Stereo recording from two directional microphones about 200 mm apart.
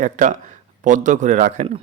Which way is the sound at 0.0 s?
40° right (ahead or behind).